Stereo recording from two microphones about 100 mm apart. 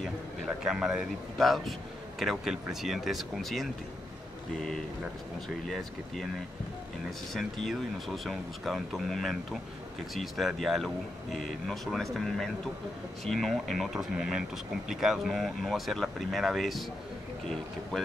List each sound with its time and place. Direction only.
0.7 s speech: 5° right (ahead or behind)
7.3 s speech: centre (ahead or behind)
17.9 s speech: 5° left (ahead or behind)